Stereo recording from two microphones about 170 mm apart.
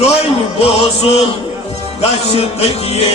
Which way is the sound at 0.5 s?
35° left (ahead or behind).